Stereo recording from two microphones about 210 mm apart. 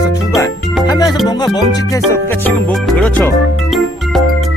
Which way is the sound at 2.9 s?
5° left (ahead or behind).